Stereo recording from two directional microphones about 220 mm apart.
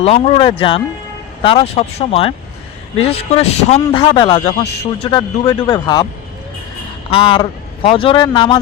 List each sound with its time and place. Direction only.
0.0 s speech: 25° left (ahead or behind)
7.1 s speech: 25° left (ahead or behind)